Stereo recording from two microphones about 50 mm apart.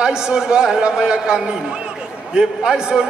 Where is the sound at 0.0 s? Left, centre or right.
Centre.